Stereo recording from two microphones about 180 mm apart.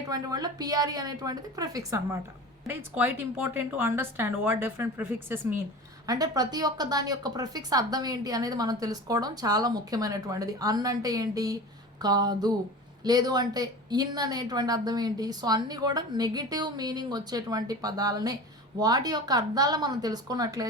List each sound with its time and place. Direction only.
0.1 s a woman's voice: 20° right (ahead or behind)
6.1 s a woman's voice: 20° right (ahead or behind)